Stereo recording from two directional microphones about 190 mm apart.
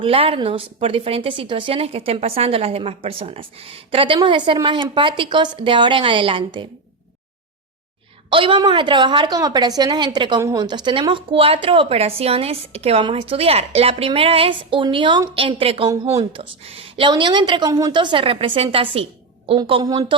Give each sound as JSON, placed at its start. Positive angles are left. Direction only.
{"t": 0.0, "sound": "a woman's voice", "side_deg": -30}
{"t": 8.3, "sound": "a woman's voice", "side_deg": -25}